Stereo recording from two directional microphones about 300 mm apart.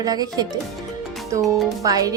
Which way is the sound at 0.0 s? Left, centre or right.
Centre.